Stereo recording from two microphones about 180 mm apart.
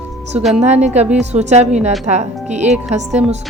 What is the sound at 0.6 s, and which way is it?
Speech, 40° right (ahead or behind).